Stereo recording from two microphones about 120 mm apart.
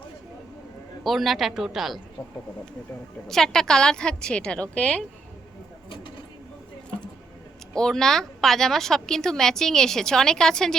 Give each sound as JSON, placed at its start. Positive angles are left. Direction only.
{"t": 1.0, "sound": "a woman's voice", "side_deg": 0}
{"t": 3.2, "sound": "a woman's voice", "side_deg": 5}
{"t": 7.7, "sound": "a woman's voice", "side_deg": 5}